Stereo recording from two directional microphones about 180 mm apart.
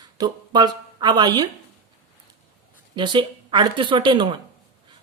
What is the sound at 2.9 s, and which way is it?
A woman's voice, 25° right (ahead or behind).